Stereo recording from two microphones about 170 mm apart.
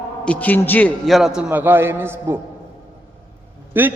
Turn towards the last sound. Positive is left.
turn(degrees=-10)  # may be behind; listen again after turning